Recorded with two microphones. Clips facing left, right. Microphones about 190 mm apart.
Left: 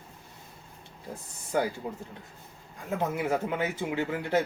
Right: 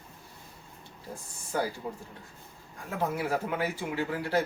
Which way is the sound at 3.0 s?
20° left (ahead or behind).